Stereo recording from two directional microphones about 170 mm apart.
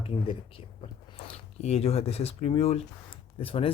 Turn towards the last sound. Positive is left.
turn(degrees=35)  # may be behind; listen again after turning